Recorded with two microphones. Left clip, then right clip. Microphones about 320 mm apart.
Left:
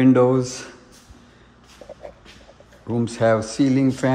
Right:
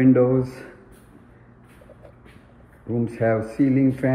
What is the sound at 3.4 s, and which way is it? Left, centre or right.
Speech, left.